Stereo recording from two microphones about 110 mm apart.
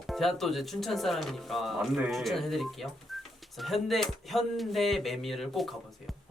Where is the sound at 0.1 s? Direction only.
Centre (ahead or behind).